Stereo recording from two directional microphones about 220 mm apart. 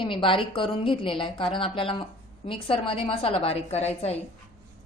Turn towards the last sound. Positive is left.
turn(degrees=30)  # may be behind; listen again after turning